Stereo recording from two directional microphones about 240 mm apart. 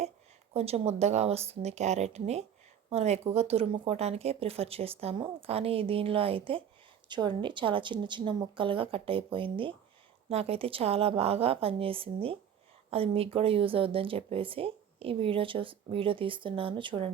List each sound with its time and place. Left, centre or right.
0.5 s speech: right